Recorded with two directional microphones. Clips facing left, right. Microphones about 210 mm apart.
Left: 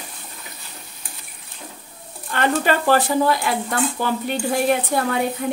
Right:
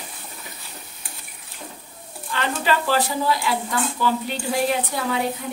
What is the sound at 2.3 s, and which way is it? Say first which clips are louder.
Speech: left 4 dB; 55° left (ahead or behind).